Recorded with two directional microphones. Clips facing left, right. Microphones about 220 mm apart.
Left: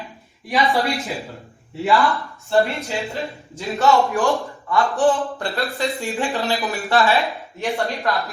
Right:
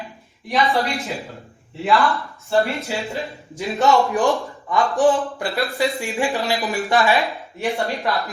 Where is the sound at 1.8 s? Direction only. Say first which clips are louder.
Even; centre (ahead or behind).